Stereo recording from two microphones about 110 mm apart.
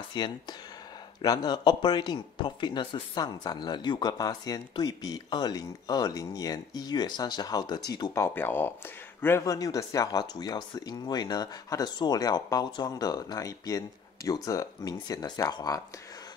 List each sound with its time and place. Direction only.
0.1 s speech: 40° left (ahead or behind)
8.1 s speech: 20° left (ahead or behind)
9.4 s speech: 30° left (ahead or behind)